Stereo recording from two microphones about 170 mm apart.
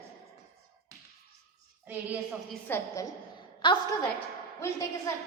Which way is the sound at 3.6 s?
30° left (ahead or behind).